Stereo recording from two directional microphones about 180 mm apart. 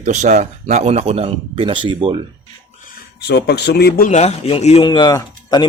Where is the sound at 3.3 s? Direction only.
65° left (ahead or behind).